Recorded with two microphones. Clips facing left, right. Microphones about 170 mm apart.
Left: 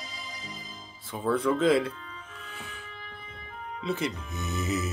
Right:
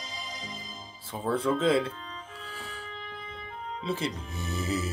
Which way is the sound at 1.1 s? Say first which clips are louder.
Left 1 dB; 30° right (ahead or behind).